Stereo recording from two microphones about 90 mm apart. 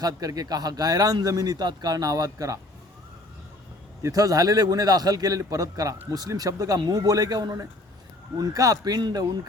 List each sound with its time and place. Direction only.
0.0 s a man's voice: 45° right (ahead or behind)
4.0 s a man's voice: 40° right (ahead or behind)